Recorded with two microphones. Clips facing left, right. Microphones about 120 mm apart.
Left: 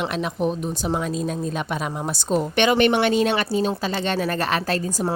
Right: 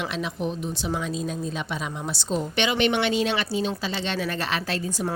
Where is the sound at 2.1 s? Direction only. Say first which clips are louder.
Left 5 dB; 55° left (ahead or behind).